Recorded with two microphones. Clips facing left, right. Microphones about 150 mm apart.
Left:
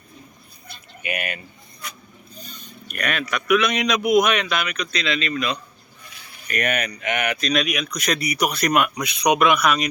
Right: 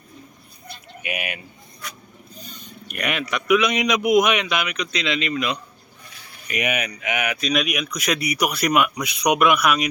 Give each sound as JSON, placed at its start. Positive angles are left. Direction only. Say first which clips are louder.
{"t": 1.0, "sound": "speech", "louder": "left 1 dB", "side_deg": -5}
{"t": 2.4, "sound": "a sound", "louder": "even", "side_deg": -20}
{"t": 2.9, "sound": "speech", "louder": "even", "side_deg": -15}